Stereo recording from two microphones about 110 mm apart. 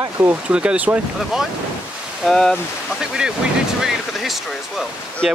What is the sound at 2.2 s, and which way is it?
Speech, 5° left (ahead or behind).